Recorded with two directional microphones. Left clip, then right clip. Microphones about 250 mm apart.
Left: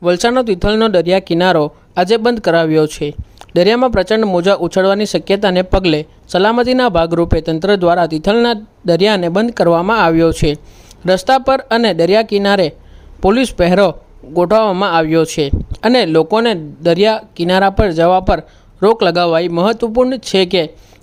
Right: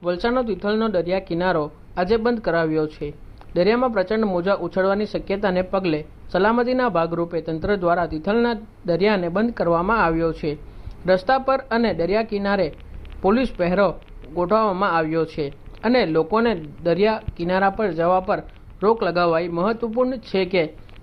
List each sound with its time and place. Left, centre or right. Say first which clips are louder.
0.0 s speech: left 9 dB; left